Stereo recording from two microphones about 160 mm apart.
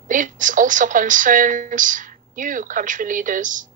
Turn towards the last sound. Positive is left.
turn(degrees=-55)  # may be behind; listen again after turning